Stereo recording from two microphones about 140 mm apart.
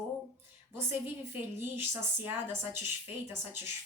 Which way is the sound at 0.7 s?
15° right (ahead or behind).